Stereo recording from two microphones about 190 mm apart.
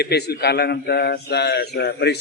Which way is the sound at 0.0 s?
60° left (ahead or behind).